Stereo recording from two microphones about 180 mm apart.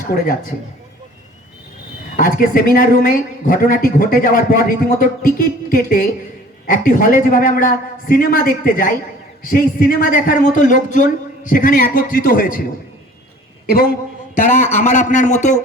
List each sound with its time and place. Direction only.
2.1 s a woman's voice: 50° left (ahead or behind)
14.3 s a woman's voice: 45° left (ahead or behind)